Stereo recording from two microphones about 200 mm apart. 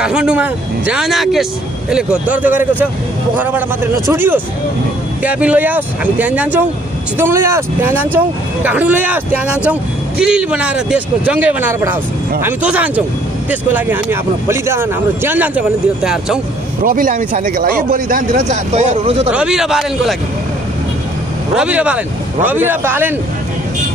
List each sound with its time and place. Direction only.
0.0 s speech: 5° right (ahead or behind)
16.8 s speech: 45° right (ahead or behind)
19.3 s speech: 5° right (ahead or behind)
21.5 s speech: 5° right (ahead or behind)